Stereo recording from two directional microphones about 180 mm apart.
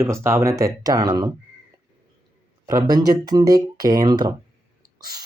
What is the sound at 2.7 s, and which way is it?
Speech, 20° right (ahead or behind).